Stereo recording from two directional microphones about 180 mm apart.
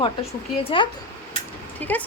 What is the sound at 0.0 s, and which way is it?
Speech, 30° left (ahead or behind).